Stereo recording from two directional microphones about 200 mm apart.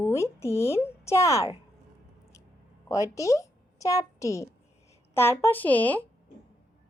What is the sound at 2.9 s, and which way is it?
A woman's voice, 15° left (ahead or behind).